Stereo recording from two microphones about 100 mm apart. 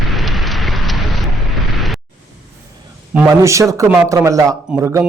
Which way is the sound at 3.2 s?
30° right (ahead or behind).